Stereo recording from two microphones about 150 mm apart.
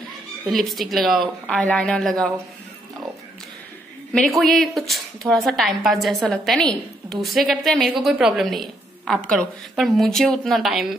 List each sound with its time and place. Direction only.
0.5 s a woman's voice: centre (ahead or behind)
4.1 s a woman's voice: centre (ahead or behind)